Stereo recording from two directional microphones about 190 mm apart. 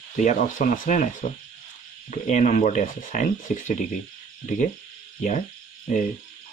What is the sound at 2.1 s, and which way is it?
Speech, 40° left (ahead or behind).